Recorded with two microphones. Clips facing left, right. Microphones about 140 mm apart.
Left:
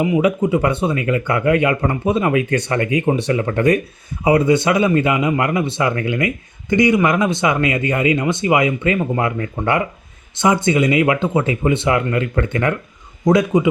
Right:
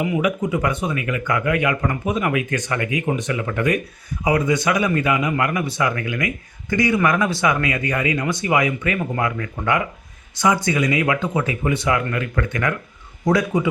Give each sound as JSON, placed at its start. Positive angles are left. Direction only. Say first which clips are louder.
{"t": 0.0, "sound": "speech", "louder": "left 5 dB", "side_deg": 25}